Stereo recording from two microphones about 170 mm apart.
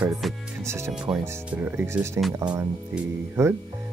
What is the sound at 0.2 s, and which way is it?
Speech, centre (ahead or behind).